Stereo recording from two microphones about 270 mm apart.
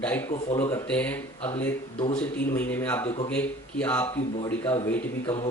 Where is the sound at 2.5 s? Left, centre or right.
Centre.